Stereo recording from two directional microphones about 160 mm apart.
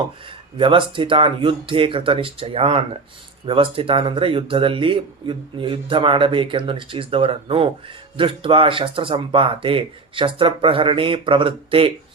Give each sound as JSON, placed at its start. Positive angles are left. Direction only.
{"t": 0.5, "sound": "speech", "side_deg": -30}